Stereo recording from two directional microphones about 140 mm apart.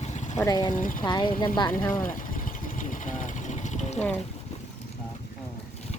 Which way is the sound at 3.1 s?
60° left (ahead or behind).